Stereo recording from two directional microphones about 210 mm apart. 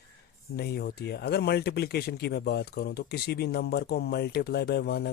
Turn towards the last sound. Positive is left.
turn(degrees=50)  # may be behind; listen again after turning